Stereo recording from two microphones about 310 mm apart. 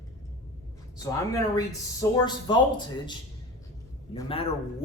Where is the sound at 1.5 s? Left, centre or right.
Centre.